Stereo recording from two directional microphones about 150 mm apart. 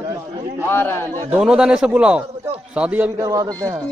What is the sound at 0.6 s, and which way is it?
Speech, 15° left (ahead or behind).